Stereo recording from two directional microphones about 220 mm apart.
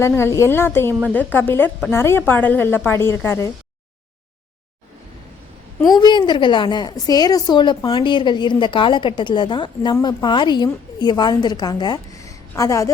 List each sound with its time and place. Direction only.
0.0 s a woman's voice: 10° left (ahead or behind)
5.9 s a woman's voice: 20° left (ahead or behind)